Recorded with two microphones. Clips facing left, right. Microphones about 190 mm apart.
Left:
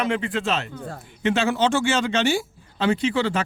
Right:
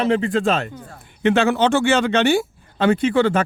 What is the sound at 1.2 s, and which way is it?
Speech, 60° right (ahead or behind).